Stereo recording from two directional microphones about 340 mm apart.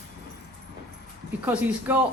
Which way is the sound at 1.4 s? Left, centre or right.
Centre.